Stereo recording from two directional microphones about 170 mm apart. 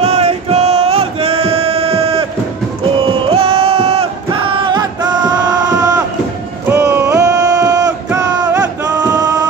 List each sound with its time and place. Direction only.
0.0 s music: 40° right (ahead or behind); by 6.0 s 20° right (ahead or behind)
6.7 s a sound: 15° right (ahead or behind)
8.1 s music: 20° right (ahead or behind)